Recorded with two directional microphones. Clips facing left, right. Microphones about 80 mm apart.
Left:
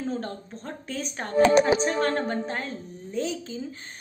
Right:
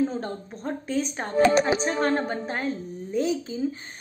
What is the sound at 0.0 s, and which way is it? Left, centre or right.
A woman's voice, centre.